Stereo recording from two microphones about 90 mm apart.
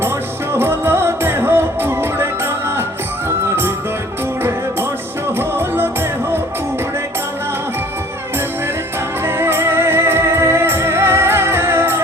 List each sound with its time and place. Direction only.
0.5 s music: 25° right (ahead or behind)
3.2 s music: 25° right (ahead or behind)
5.4 s music: 25° right (ahead or behind)
9.2 s music: 25° right (ahead or behind)